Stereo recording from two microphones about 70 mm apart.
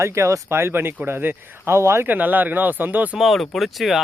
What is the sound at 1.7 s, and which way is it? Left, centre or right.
Speech, right.